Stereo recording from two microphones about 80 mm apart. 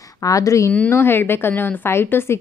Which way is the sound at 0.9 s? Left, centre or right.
Left.